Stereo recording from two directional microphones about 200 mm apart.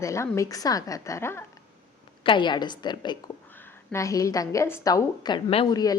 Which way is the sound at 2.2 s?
25° left (ahead or behind).